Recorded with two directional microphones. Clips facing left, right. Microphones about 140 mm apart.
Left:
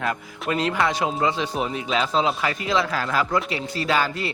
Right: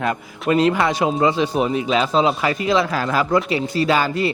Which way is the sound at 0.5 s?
15° right (ahead or behind).